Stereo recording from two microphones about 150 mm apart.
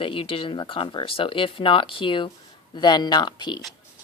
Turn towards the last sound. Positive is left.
turn(degrees=30)  # may be behind; listen again after turning